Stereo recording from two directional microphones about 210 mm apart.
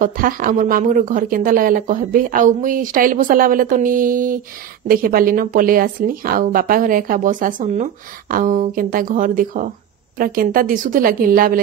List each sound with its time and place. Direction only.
0.0 s a woman's voice: 40° right (ahead or behind)